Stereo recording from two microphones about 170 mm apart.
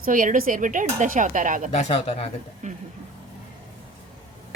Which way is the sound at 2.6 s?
45° right (ahead or behind).